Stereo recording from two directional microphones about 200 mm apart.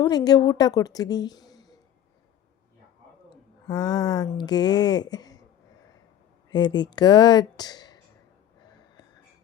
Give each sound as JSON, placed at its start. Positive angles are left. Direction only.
{"t": 0.0, "sound": "a woman's voice", "side_deg": 20}
{"t": 3.7, "sound": "a woman's voice", "side_deg": 20}
{"t": 6.5, "sound": "a woman's voice", "side_deg": 20}